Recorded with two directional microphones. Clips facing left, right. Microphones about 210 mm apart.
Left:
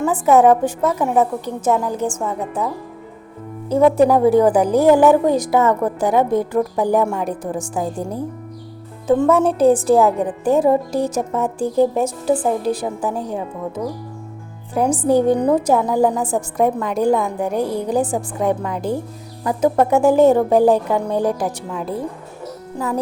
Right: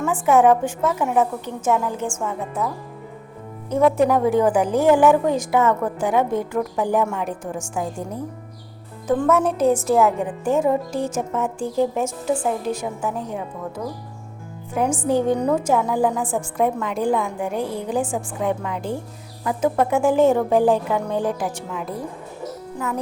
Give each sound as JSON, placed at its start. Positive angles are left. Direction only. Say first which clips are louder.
{"t": 0.0, "sound": "a woman's voice", "louder": "left 3 dB", "side_deg": 40}
{"t": 3.7, "sound": "a woman's voice", "louder": "left 4 dB", "side_deg": 30}
{"t": 14.7, "sound": "a woman's voice", "louder": "left 4 dB", "side_deg": 35}